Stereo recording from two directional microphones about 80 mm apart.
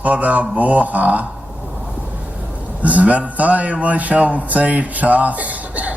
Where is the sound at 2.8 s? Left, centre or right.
Centre.